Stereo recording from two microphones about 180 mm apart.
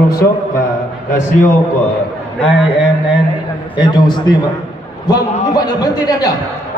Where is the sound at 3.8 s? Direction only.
25° left (ahead or behind).